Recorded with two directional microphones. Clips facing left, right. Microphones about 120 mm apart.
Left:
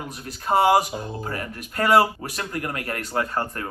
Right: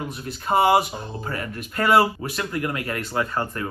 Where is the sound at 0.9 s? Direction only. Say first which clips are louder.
Left 2 dB; 25° right (ahead or behind).